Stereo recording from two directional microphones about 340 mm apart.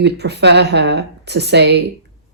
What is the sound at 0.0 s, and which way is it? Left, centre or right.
Speech, right.